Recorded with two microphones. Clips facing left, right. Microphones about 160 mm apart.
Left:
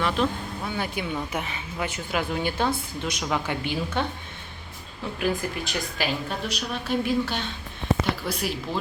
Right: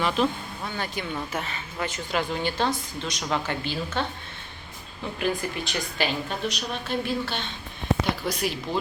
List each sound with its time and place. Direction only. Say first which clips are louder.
0.0 s speech: even; centre (ahead or behind)
0.8 s a woman's voice: left 1 dB; 10° left (ahead or behind)
5.2 s a woman's voice: left 1 dB; centre (ahead or behind)